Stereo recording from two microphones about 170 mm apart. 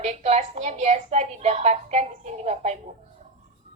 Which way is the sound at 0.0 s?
40° right (ahead or behind).